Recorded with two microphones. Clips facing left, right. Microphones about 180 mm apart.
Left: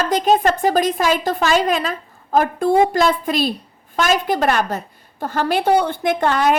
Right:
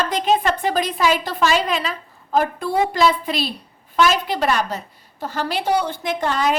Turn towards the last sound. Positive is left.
turn(degrees=60)  # may be behind; listen again after turning